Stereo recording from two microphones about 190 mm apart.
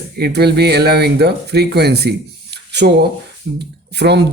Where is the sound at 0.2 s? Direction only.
60° right (ahead or behind).